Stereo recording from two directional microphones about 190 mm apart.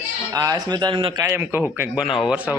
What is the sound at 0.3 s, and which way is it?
A man's voice, 20° right (ahead or behind).